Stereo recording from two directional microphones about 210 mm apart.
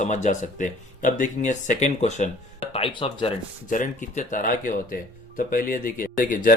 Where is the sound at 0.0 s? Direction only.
35° left (ahead or behind).